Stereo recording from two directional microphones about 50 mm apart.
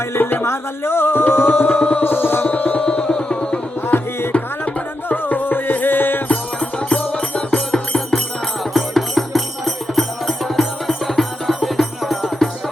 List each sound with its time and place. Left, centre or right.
0.1 s music: left
2.8 s music: centre
3.9 s music: left
5.0 s music: left
6.2 s music: left
8.7 s music: centre